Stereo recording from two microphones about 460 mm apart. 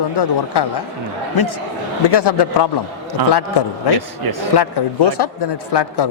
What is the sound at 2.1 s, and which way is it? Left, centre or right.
A man's voice, left.